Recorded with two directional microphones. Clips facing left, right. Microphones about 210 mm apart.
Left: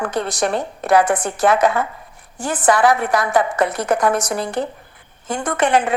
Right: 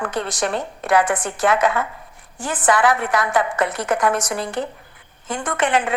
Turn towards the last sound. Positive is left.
turn(degrees=40)  # may be behind; listen again after turning